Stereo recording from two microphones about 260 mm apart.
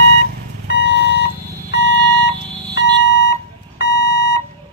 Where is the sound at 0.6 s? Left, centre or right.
Left.